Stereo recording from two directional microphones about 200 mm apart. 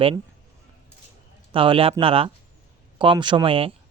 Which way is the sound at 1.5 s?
25° right (ahead or behind).